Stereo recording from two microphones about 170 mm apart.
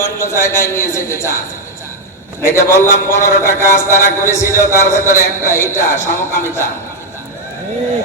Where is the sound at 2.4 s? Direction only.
15° left (ahead or behind).